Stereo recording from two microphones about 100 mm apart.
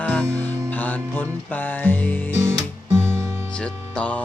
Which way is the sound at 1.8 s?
20° left (ahead or behind).